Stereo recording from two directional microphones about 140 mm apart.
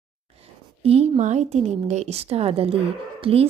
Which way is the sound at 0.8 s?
45° right (ahead or behind).